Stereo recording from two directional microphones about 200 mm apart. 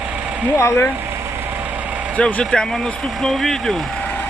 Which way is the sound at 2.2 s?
5° left (ahead or behind).